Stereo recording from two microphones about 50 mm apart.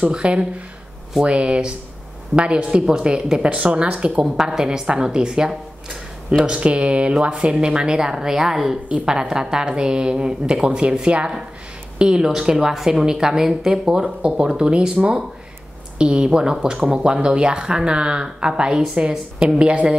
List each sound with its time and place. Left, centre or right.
0.1 s a woman's voice: right
4.2 s a woman's voice: centre
8.8 s a woman's voice: right
16.0 s a woman's voice: centre
19.7 s speech: right